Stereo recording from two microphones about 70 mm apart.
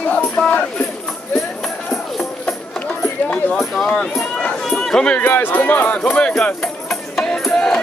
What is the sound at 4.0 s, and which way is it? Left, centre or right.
Run, centre.